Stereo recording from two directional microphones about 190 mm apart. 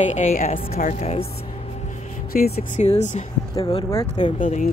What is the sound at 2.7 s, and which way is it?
Speech, 35° left (ahead or behind).